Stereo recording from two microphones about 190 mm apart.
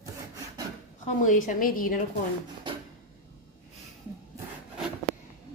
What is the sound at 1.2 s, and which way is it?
Speech, 40° left (ahead or behind).